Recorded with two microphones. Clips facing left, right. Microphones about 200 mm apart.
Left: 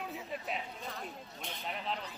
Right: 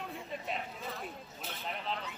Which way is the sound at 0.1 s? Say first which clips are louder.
Even; centre (ahead or behind).